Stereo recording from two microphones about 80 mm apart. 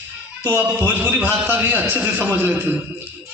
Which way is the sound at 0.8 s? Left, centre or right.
Right.